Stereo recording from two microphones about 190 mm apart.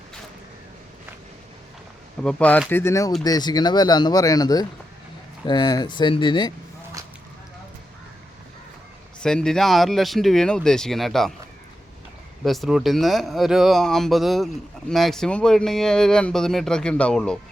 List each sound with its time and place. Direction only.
2.2 s speech: 5° left (ahead or behind); by 6.5 s 25° left (ahead or behind)
9.2 s speech: 5° left (ahead or behind)
12.5 s speech: centre (ahead or behind)